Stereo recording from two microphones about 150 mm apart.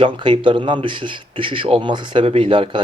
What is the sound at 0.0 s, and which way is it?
Speech, 35° right (ahead or behind).